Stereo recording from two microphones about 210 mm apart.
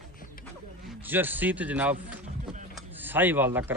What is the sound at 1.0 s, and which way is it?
Speech, 10° right (ahead or behind).